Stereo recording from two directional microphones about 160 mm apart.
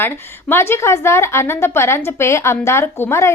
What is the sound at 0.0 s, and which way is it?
A woman's voice, 15° left (ahead or behind).